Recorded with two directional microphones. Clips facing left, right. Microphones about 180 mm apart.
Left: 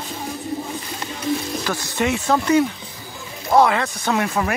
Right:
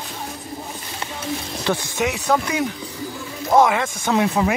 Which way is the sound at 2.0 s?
10° right (ahead or behind).